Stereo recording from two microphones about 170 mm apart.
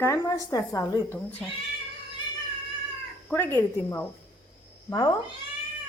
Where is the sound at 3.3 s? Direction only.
10° left (ahead or behind).